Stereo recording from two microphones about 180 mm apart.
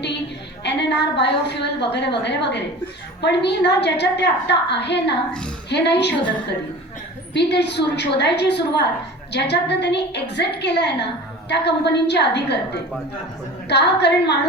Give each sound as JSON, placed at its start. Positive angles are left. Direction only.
{"t": 0.6, "sound": "a woman's voice", "side_deg": 70}
{"t": 7.3, "sound": "a woman's voice", "side_deg": 70}
{"t": 13.7, "sound": "a woman's voice", "side_deg": 70}